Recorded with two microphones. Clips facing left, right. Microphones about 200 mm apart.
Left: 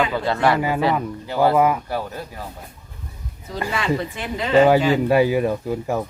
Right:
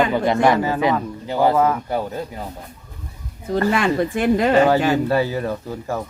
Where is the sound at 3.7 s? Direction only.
50° right (ahead or behind).